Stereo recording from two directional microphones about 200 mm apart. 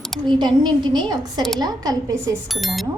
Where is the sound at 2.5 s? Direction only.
Centre (ahead or behind).